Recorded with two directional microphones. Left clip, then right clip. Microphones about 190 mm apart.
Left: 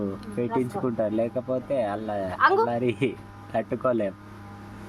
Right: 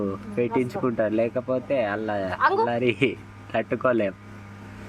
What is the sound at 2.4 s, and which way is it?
Speech, 20° left (ahead or behind).